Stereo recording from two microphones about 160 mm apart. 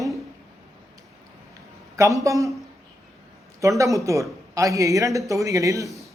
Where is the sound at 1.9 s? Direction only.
20° right (ahead or behind).